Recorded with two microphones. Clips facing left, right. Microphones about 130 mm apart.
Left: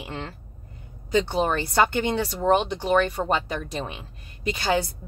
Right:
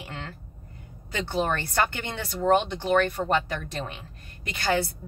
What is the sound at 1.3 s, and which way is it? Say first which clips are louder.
Speech: left 3 dB; 20° left (ahead or behind).